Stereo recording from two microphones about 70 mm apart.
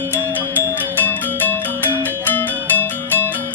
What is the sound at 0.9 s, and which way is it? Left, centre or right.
Music, left.